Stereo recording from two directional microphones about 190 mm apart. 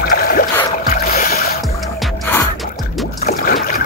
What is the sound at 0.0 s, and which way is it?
Boat, 50° left (ahead or behind).